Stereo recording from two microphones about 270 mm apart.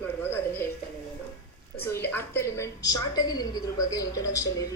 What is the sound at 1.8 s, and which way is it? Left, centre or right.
A woman's voice, centre.